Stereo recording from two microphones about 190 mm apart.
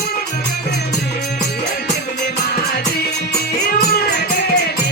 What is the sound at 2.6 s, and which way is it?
Music, 55° left (ahead or behind).